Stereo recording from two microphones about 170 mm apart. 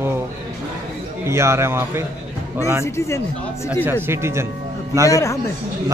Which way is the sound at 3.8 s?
15° right (ahead or behind).